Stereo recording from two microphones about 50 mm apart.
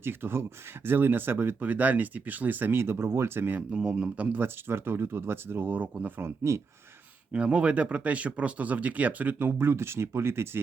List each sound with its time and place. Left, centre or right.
0.0 s speech: right
1.7 s speech: right
2.7 s speech: right
3.7 s a man's voice: centre
3.9 s speech: right
4.4 s speech: right
7.3 s speech: right
9.5 s speech: right